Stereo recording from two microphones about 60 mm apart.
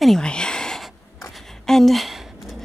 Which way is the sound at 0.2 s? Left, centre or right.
Centre.